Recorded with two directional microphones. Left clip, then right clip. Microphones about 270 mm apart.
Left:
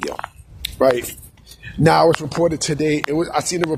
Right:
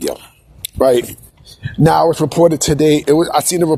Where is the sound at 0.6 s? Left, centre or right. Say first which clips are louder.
Right 4 dB; right.